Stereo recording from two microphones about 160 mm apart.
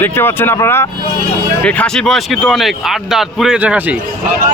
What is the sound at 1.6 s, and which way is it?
Speech, 5° left (ahead or behind).